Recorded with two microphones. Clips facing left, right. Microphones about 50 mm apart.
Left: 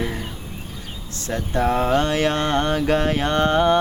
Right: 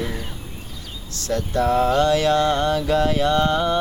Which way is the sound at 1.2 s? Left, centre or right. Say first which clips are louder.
Right 1 dB; left.